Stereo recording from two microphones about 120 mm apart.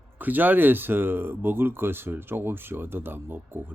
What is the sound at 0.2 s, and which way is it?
Speech, 15° right (ahead or behind).